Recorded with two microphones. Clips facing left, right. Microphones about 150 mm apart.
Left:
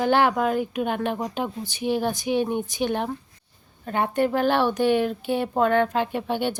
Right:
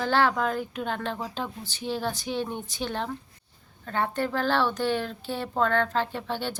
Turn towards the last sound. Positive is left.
turn(degrees=15)  # may be behind; listen again after turning